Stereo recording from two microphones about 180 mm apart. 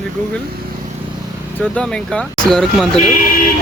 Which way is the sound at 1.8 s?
5° left (ahead or behind).